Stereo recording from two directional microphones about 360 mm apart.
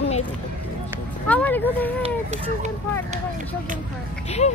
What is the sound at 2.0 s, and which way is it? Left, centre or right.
Speech, centre.